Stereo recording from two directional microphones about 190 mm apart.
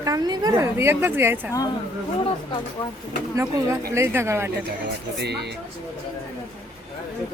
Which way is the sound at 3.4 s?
15° right (ahead or behind).